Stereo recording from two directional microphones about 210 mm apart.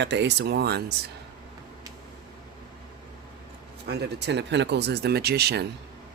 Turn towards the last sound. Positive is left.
turn(degrees=-50)  # may be behind; listen again after turning